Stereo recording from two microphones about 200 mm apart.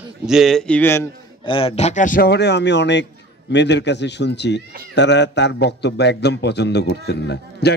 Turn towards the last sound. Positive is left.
turn(degrees=55)  # may be behind; listen again after turning